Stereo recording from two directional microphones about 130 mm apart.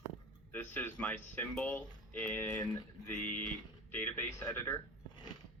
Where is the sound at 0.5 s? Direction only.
15° left (ahead or behind).